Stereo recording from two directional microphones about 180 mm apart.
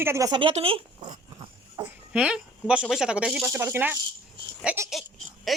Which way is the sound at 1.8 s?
25° right (ahead or behind).